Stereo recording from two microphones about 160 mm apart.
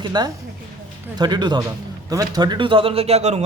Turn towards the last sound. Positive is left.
turn(degrees=-40)  # may be behind; listen again after turning